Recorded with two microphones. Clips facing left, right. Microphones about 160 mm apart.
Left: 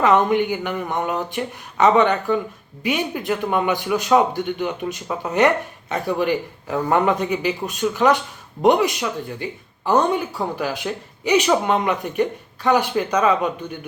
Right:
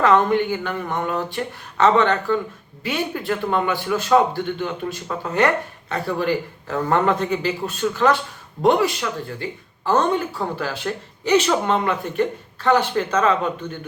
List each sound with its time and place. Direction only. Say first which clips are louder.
0.0 s speech: even; 15° left (ahead or behind)